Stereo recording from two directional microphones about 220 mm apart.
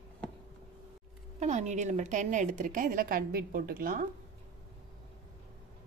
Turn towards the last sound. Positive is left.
turn(degrees=-40)  # may be behind; listen again after turning